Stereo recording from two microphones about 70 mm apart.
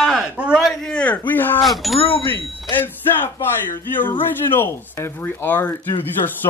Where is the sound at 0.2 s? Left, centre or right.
Centre.